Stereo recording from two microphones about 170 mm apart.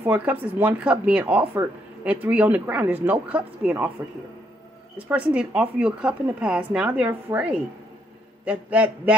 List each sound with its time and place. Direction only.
0.0 s speech: 10° right (ahead or behind)
4.9 s speech: 10° right (ahead or behind)